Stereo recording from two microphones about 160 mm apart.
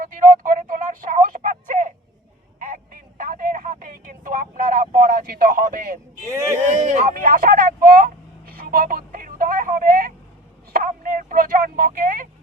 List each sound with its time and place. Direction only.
0.0 s a sound: 55° right (ahead or behind)
6.2 s speech: 15° right (ahead or behind)
6.8 s vehicle: 50° right (ahead or behind)